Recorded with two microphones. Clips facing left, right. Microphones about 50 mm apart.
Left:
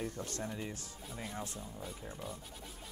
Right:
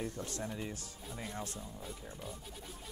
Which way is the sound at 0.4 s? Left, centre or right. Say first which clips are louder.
Even; centre.